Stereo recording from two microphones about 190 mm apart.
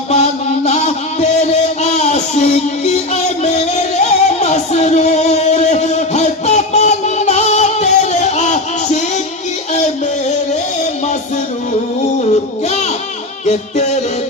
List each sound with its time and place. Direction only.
0.1 s a sound: 35° left (ahead or behind)
9.7 s music: 35° left (ahead or behind)
13.4 s music: 35° left (ahead or behind)